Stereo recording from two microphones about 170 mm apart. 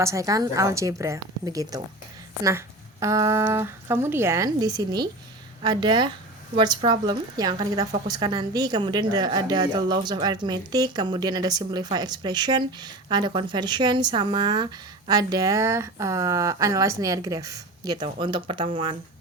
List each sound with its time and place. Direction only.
0.0 s a woman's voice: 20° right (ahead or behind)